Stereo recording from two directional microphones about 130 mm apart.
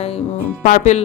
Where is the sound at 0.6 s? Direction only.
70° left (ahead or behind).